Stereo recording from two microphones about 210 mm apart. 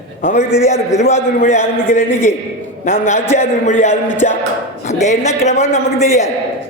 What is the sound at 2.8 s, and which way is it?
A man's voice, 35° left (ahead or behind).